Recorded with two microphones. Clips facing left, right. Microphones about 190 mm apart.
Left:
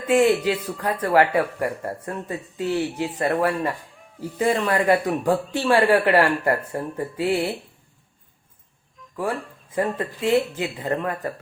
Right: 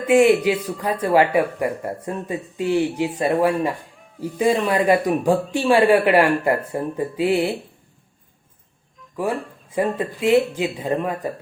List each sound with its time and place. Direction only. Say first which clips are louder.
0.0 s a man's voice: right 3 dB; 10° right (ahead or behind)
6.6 s a man's voice: right 4 dB; 10° right (ahead or behind)
9.1 s a man's voice: right 3 dB; 20° right (ahead or behind)